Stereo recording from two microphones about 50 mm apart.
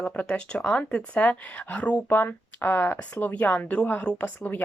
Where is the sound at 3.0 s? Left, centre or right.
Left.